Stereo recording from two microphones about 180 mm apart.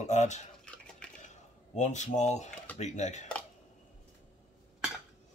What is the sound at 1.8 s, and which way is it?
Speech, 40° left (ahead or behind).